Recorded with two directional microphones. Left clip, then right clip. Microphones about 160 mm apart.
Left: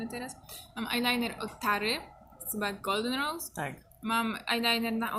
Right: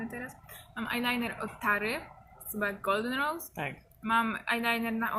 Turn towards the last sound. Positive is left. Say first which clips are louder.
# left 1 dB
turn(degrees=10)  # may be behind; listen again after turning